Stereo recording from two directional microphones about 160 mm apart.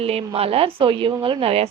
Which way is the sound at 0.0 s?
40° right (ahead or behind).